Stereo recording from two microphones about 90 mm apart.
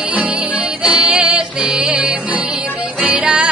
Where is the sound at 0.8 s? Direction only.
15° right (ahead or behind).